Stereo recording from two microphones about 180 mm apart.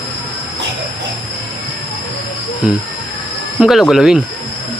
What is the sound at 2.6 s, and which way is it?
Speech, 5° right (ahead or behind).